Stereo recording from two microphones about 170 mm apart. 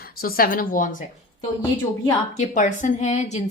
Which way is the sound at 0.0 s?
60° left (ahead or behind).